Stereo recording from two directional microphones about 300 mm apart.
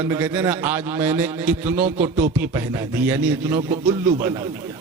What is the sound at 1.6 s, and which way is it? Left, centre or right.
Speech, right.